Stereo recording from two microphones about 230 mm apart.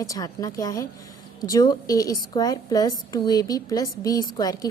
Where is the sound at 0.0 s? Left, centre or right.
Centre.